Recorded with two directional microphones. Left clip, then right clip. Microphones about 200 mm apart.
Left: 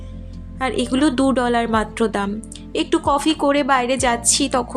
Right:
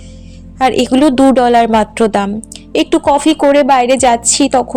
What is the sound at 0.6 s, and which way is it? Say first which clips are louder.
A woman's voice: right 9 dB; 35° right (ahead or behind).